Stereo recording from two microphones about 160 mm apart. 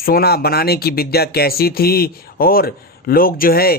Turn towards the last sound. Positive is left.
turn(degrees=65)  # may be behind; listen again after turning